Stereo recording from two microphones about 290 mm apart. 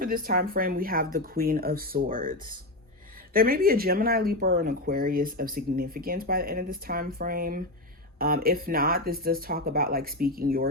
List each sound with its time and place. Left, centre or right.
0.0 s speech: right